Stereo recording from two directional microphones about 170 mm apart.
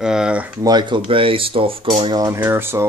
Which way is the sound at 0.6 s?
25° right (ahead or behind).